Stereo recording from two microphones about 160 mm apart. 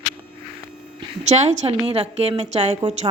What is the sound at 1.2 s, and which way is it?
A woman's voice, 45° right (ahead or behind).